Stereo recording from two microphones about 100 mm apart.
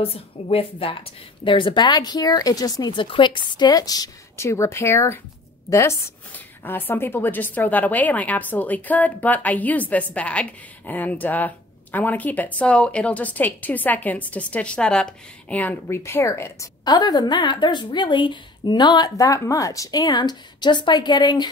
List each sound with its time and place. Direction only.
0.0 s a woman's voice: 70° left (ahead or behind); by 4.5 s 40° left (ahead or behind)
4.5 s a woman's voice: 25° left (ahead or behind)
16.0 s speech: 25° left (ahead or behind)
16.8 s a woman's voice: 45° left (ahead or behind)